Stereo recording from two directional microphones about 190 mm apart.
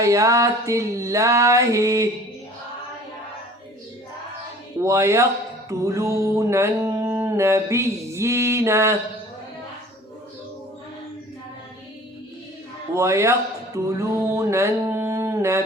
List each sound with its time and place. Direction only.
0.0 s speech: 15° right (ahead or behind)
4.8 s speech: 15° right (ahead or behind)
12.9 s speech: 15° right (ahead or behind)
13.7 s music: 15° right (ahead or behind)